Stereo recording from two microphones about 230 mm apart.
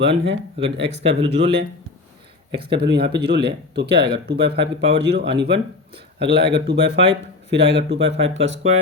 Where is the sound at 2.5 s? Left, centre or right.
Right.